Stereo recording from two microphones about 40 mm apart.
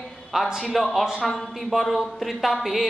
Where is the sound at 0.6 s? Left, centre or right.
Centre.